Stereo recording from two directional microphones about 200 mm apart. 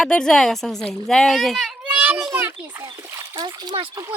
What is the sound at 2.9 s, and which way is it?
Splash, 15° right (ahead or behind).